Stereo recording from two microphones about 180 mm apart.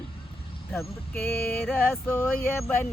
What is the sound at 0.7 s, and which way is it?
Male singing, 5° left (ahead or behind).